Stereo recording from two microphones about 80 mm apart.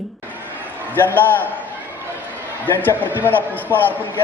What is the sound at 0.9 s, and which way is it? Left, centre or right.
Speech, left.